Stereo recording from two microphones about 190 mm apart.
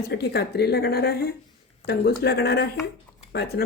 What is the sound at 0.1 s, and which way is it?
Speech, 60° left (ahead or behind).